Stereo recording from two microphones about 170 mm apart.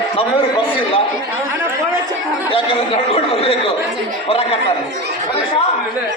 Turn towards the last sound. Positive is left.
turn(degrees=35)  # may be behind; listen again after turning